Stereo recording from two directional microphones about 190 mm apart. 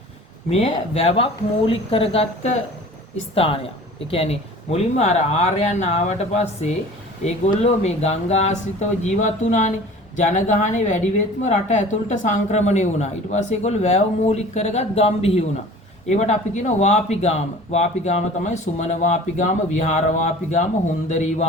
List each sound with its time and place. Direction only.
0.5 s speech: 35° left (ahead or behind)